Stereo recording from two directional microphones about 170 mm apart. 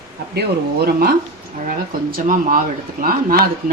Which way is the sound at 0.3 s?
65° right (ahead or behind).